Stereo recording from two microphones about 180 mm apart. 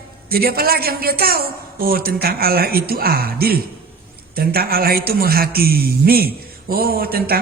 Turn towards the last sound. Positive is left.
turn(degrees=-55)  # may be behind; listen again after turning